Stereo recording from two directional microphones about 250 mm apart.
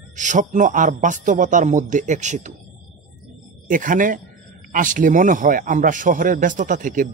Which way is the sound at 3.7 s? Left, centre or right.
Right.